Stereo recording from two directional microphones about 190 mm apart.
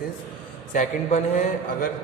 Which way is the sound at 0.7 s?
40° left (ahead or behind).